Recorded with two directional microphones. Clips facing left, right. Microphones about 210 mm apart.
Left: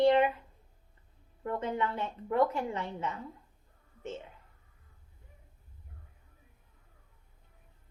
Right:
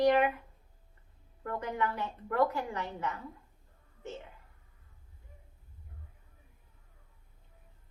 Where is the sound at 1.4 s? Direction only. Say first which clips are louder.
Left 2 dB; 25° left (ahead or behind).